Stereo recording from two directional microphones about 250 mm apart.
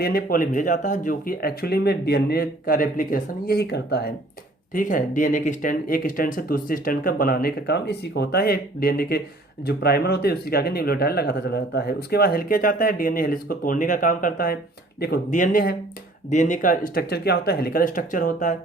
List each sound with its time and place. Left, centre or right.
0.0 s speech: left